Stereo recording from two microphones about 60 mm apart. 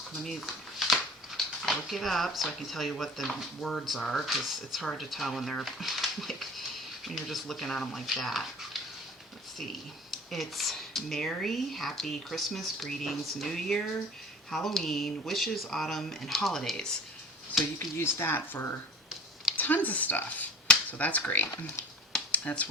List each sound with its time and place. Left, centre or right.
0.2 s speech: centre
10.1 s speech: centre
17.7 s speech: left
19.5 s speech: left
22.3 s a sound: left